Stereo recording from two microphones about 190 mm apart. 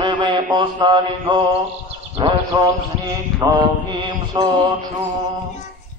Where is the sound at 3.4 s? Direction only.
20° right (ahead or behind).